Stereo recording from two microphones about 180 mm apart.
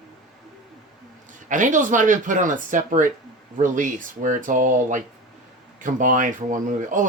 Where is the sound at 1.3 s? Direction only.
45° right (ahead or behind).